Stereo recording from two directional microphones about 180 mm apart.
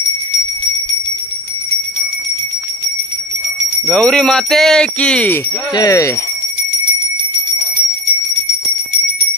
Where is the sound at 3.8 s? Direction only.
5° left (ahead or behind).